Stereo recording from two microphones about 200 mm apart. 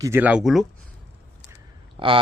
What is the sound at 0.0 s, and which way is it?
Speech, 10° right (ahead or behind).